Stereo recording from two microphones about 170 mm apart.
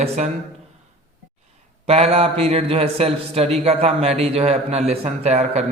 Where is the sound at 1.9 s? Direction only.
35° right (ahead or behind).